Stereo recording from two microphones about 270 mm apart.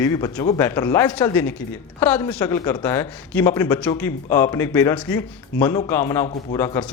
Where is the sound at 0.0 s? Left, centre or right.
Centre.